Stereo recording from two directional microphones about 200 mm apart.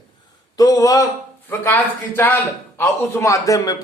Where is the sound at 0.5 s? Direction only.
15° left (ahead or behind).